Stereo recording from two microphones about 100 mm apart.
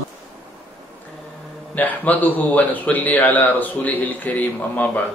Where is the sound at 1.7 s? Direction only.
15° left (ahead or behind).